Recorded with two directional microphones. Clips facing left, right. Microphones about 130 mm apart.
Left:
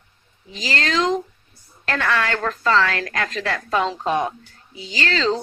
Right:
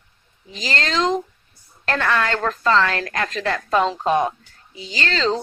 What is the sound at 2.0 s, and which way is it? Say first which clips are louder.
A woman's voice: right 1 dB; 20° right (ahead or behind).